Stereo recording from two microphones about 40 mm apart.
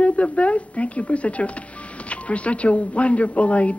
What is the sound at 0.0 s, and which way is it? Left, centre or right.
Speech, left.